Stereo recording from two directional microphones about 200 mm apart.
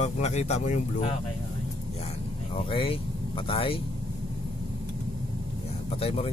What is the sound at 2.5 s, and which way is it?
Speech, 30° left (ahead or behind).